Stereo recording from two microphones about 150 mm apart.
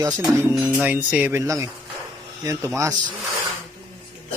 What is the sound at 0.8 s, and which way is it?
Speech, 10° right (ahead or behind).